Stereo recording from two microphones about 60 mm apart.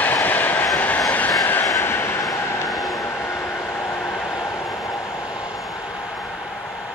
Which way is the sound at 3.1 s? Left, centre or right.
Left.